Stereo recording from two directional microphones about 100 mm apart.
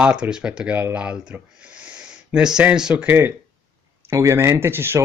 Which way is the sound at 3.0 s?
25° right (ahead or behind).